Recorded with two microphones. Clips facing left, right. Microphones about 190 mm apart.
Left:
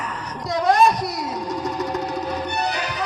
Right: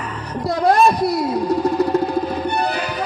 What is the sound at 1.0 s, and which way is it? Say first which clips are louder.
Music: right 8 dB; 60° right (ahead or behind).